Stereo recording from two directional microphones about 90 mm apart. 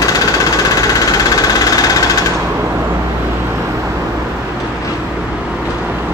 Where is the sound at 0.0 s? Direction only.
40° left (ahead or behind).